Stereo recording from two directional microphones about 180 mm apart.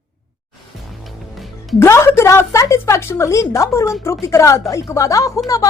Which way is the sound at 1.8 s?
15° left (ahead or behind).